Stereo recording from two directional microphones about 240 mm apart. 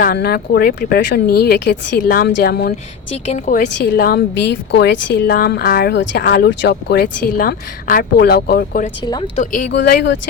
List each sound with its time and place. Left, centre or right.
0.0 s a woman's voice: left
9.7 s a woman's voice: left